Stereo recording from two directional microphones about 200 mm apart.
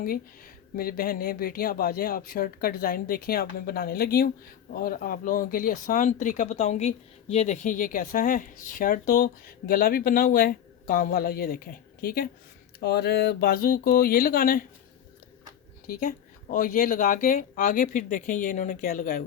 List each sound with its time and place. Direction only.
0.8 s speech: 45° left (ahead or behind)
15.9 s speech: 45° left (ahead or behind)